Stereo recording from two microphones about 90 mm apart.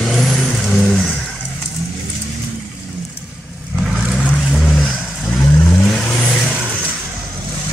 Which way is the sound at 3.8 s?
5° right (ahead or behind).